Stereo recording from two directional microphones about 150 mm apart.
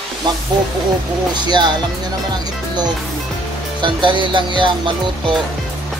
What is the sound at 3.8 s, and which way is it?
Speech, 30° right (ahead or behind).